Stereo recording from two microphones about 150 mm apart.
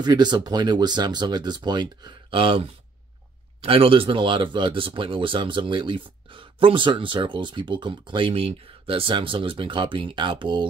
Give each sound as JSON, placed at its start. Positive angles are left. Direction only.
{"t": 0.0, "sound": "speech", "side_deg": -30}